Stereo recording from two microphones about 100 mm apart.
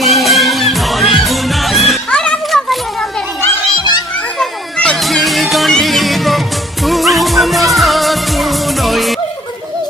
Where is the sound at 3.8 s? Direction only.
45° left (ahead or behind).